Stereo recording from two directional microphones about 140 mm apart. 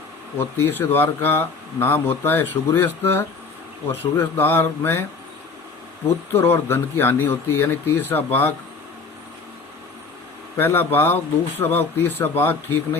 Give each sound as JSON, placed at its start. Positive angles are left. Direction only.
{"t": 0.3, "sound": "speech", "side_deg": 15}
{"t": 6.3, "sound": "speech", "side_deg": 15}
{"t": 10.6, "sound": "speech", "side_deg": 15}